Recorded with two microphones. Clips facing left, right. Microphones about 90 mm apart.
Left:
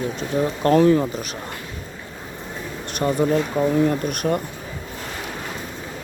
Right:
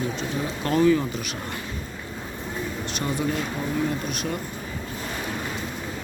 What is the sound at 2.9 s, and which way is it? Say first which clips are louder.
Speech: left 8 dB; 35° left (ahead or behind).